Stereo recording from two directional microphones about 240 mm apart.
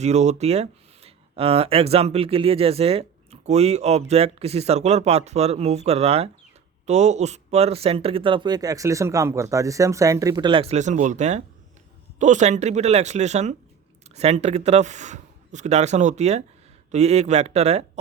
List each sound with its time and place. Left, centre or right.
0.0 s speech: right